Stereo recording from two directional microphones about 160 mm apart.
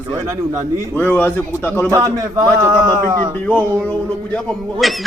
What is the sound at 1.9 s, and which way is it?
Speech, 20° right (ahead or behind).